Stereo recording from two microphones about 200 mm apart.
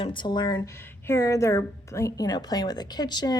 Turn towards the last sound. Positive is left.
turn(degrees=20)  # may be behind; listen again after turning